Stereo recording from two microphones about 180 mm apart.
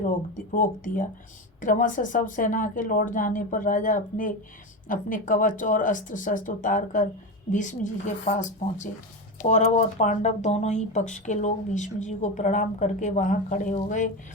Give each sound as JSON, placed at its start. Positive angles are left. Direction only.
{"t": 0.5, "sound": "speech", "side_deg": 50}